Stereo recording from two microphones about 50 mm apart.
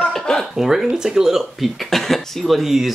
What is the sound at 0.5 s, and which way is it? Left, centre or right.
Speech, centre.